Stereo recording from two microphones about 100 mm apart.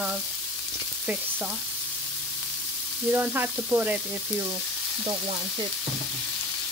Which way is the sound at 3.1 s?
20° right (ahead or behind).